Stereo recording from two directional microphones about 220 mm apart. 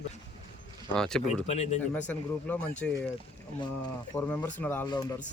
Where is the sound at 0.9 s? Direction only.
Centre (ahead or behind).